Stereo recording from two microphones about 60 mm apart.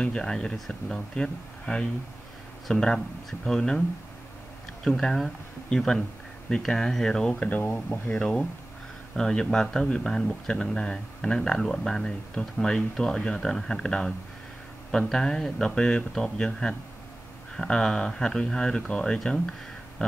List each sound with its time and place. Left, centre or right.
0.0 s speech: centre
4.8 s speech: centre
7.4 s speech: left
8.2 s speech: centre